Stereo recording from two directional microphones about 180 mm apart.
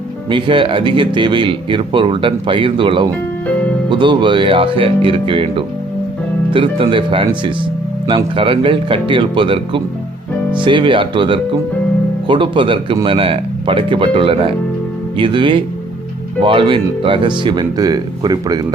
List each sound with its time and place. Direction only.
0.3 s speech: 25° right (ahead or behind)